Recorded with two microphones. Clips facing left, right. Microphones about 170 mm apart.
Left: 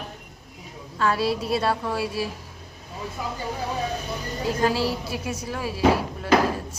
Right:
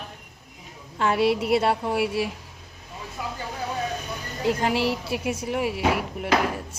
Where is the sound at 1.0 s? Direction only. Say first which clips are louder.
Right 2 dB; 20° right (ahead or behind).